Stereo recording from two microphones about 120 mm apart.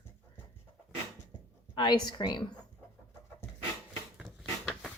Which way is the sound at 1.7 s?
40° left (ahead or behind).